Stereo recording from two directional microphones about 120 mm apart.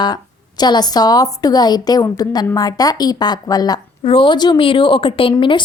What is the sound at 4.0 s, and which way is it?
A woman's voice, 45° left (ahead or behind).